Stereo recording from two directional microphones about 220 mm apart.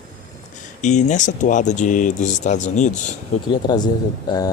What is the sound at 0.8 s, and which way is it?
Speech, 30° left (ahead or behind).